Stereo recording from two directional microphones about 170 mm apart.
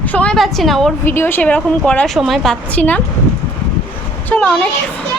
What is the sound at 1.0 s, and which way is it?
A woman's voice, 15° left (ahead or behind).